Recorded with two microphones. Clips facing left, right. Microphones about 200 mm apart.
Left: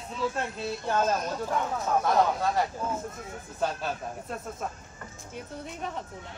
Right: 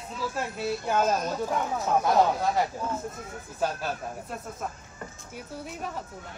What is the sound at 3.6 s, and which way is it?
Speech, 5° right (ahead or behind).